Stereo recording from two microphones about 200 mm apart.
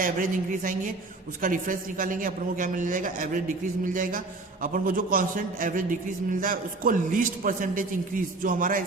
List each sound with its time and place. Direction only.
0.0 s a man's voice: 40° right (ahead or behind)